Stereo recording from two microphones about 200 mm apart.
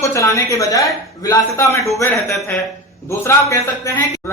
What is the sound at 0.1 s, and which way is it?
A man's voice, 15° left (ahead or behind).